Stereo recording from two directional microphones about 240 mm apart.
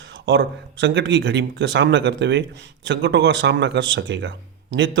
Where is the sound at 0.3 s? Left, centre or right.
Right.